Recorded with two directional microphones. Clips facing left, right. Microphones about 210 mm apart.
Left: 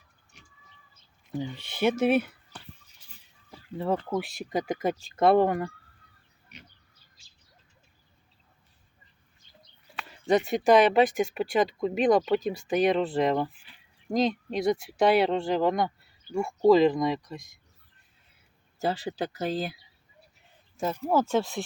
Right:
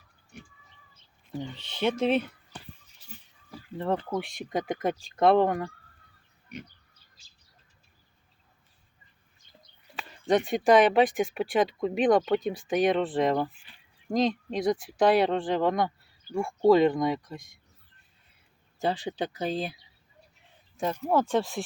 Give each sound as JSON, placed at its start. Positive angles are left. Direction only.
{"t": 0.3, "sound": "bird", "side_deg": -55}
{"t": 1.3, "sound": "speech", "side_deg": 10}
{"t": 3.8, "sound": "speech", "side_deg": 5}
{"t": 10.2, "sound": "speech", "side_deg": 5}
{"t": 18.8, "sound": "speech", "side_deg": 5}